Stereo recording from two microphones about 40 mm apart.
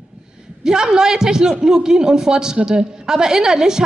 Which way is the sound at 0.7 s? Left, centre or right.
Centre.